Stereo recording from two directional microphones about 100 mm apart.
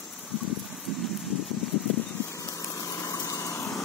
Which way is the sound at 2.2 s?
35° left (ahead or behind).